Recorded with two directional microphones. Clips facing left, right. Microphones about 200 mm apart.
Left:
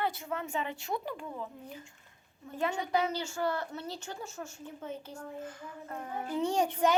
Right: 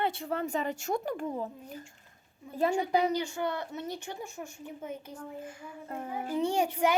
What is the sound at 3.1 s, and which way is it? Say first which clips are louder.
Speech: right 2 dB; 15° right (ahead or behind).